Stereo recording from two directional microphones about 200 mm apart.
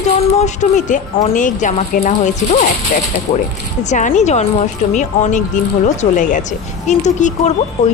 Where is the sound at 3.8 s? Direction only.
40° left (ahead or behind).